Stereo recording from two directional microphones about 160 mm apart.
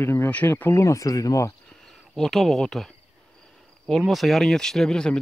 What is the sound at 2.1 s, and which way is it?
Speech, centre (ahead or behind).